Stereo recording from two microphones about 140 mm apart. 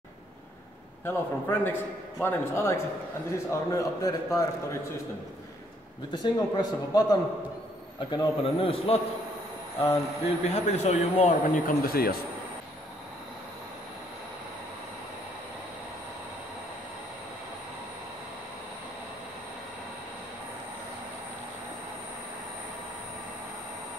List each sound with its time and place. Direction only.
1.0 s a man's voice: 15° left (ahead or behind)
6.1 s a man's voice: 30° left (ahead or behind); by 11.3 s 50° left (ahead or behind)
11.6 s speech: 90° left